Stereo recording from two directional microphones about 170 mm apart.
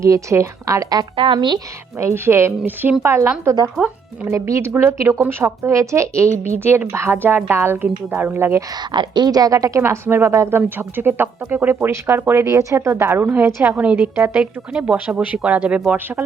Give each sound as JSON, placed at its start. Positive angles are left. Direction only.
{"t": 0.0, "sound": "speech", "side_deg": -20}
{"t": 3.8, "sound": "speech", "side_deg": -10}
{"t": 8.9, "sound": "speech", "side_deg": -25}